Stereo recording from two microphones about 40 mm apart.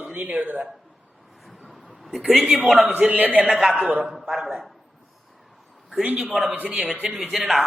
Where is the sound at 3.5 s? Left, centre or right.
Centre.